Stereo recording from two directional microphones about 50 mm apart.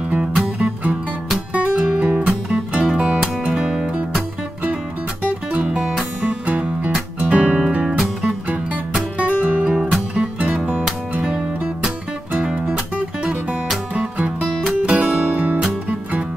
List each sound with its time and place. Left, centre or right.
0.6 s music: right
5.2 s music: right
5.7 s music: centre
6.4 s music: right
9.2 s music: right
13.9 s music: right
14.4 s music: centre
14.9 s music: right